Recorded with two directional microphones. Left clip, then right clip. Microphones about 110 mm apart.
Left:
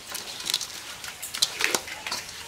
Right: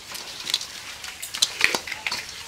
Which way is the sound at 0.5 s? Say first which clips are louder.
Right 2 dB; 10° left (ahead or behind).